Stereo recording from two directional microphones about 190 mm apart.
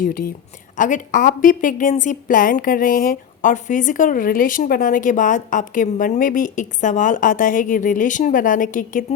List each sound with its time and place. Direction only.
0.0 s a woman's voice: 50° left (ahead or behind)